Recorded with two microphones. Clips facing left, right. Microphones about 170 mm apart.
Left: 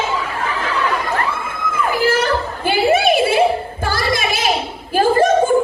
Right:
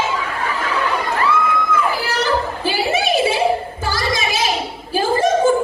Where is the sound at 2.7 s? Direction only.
55° left (ahead or behind).